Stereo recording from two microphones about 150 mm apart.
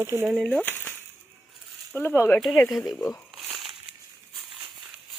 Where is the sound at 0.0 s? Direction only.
15° right (ahead or behind).